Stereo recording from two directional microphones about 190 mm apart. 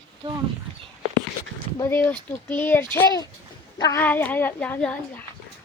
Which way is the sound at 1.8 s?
10° left (ahead or behind).